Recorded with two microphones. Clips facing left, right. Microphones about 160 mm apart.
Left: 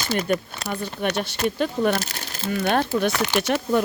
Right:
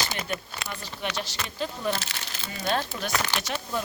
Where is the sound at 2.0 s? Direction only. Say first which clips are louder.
Left 6 dB; 55° left (ahead or behind).